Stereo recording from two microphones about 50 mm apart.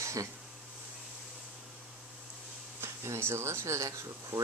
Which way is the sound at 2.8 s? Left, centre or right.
Right.